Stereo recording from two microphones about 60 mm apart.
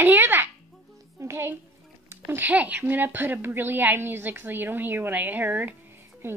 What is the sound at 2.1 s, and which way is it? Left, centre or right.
Music, right.